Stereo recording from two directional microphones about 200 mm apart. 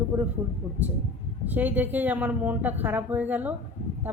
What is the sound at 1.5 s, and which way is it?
A woman's voice, 10° right (ahead or behind).